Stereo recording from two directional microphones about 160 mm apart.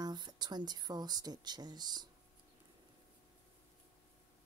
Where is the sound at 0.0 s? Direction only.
25° right (ahead or behind).